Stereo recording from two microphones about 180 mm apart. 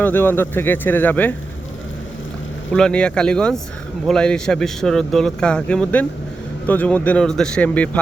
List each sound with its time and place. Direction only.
0.0 s speech: 10° left (ahead or behind)
2.7 s speech: 5° left (ahead or behind)